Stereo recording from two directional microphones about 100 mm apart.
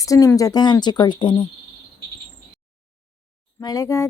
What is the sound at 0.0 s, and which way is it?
Speech, 35° left (ahead or behind).